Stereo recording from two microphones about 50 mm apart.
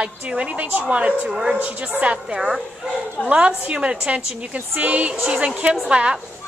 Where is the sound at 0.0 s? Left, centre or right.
Right.